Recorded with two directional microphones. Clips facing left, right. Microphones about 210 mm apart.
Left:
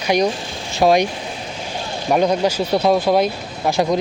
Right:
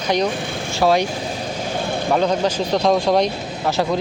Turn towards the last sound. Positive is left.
turn(degrees=5)  # may be behind; listen again after turning